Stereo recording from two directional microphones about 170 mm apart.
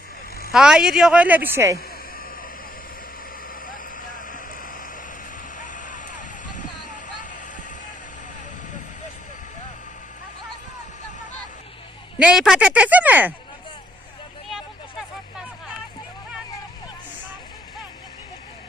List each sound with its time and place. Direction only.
0.5 s speech: 5° right (ahead or behind)
3.5 s vehicle: 55° left (ahead or behind)
12.2 s a man's voice: 5° right (ahead or behind)